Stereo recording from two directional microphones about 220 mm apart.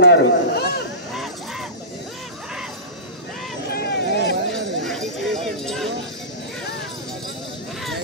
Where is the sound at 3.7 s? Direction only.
50° left (ahead or behind).